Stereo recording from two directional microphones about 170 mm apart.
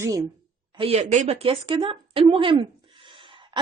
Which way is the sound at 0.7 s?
35° right (ahead or behind).